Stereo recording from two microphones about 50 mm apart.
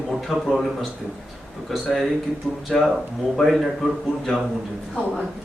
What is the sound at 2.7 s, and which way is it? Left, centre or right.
A man's voice, centre.